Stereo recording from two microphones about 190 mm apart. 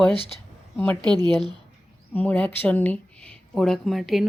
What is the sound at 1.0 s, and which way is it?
Speech, 20° right (ahead or behind).